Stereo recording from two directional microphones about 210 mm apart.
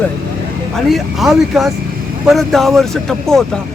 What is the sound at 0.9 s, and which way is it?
Speech, centre (ahead or behind).